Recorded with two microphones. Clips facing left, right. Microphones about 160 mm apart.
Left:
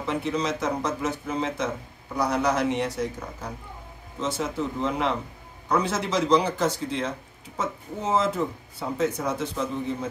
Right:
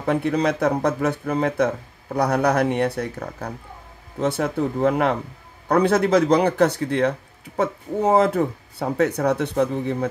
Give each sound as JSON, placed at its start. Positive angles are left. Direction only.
{"t": 0.0, "sound": "speech", "side_deg": -55}